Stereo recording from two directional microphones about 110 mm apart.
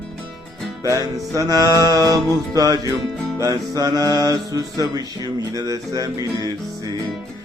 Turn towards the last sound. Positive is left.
turn(degrees=-35)  # may be behind; listen again after turning